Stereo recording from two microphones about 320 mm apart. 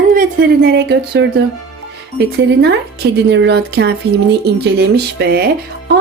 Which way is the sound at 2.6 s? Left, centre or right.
Right.